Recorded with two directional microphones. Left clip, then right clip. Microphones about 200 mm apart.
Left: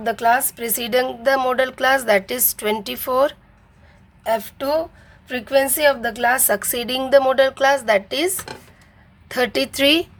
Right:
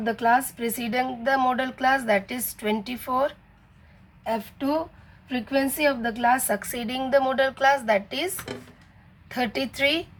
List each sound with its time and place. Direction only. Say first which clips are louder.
0.0 s a woman's voice: left 4 dB; 40° left (ahead or behind)
4.2 s a woman's voice: left 7 dB; 45° left (ahead or behind)